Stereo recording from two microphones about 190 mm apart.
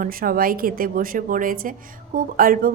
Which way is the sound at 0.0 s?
50° right (ahead or behind).